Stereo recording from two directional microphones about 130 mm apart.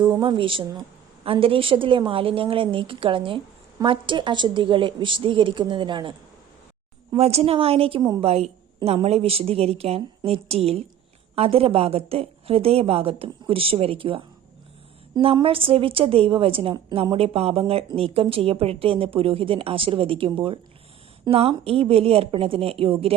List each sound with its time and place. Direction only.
0.2 s a woman's voice: 40° right (ahead or behind)
7.1 s a woman's voice: 50° right (ahead or behind)